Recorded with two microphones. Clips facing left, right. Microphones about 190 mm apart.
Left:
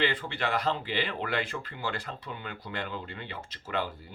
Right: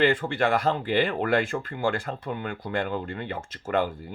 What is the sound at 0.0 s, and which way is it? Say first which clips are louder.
Speech: right 8 dB; 50° right (ahead or behind).